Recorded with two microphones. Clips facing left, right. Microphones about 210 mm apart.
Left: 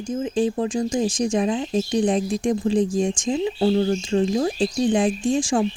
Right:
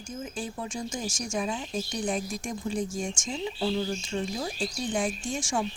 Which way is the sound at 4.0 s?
90° left.